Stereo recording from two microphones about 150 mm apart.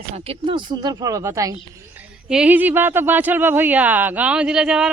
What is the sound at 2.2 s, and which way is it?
Speech, 5° right (ahead or behind).